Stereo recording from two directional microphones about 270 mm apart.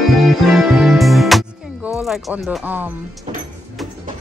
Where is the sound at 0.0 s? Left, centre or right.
Centre.